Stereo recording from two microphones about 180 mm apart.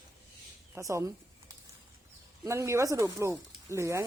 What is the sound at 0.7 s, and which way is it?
Speech, 15° right (ahead or behind).